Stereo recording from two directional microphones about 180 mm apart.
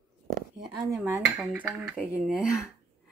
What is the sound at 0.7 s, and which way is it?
Dishes, 20° right (ahead or behind).